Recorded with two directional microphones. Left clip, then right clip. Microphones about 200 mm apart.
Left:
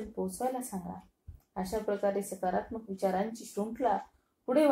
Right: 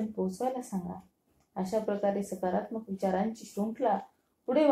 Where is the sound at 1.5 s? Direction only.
40° left (ahead or behind).